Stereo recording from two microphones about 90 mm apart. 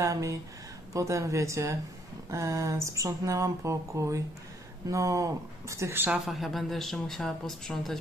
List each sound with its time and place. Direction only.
0.0 s speech: 35° right (ahead or behind)
6.2 s speech: centre (ahead or behind)